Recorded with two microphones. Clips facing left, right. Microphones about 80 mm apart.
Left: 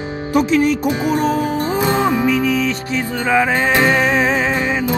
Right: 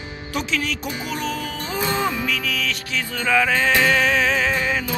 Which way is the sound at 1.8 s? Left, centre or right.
Left.